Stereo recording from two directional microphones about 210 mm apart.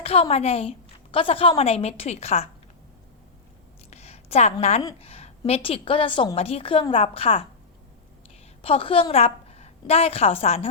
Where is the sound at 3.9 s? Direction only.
30° left (ahead or behind).